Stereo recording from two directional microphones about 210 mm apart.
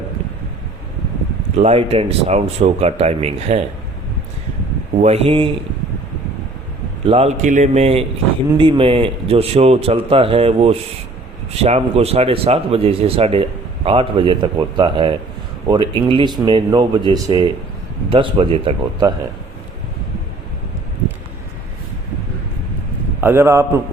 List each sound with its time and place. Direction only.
1.5 s speech: 30° right (ahead or behind)
5.0 s speech: 30° right (ahead or behind)
7.0 s a man's voice: 30° right (ahead or behind)
23.2 s a man's voice: 10° right (ahead or behind)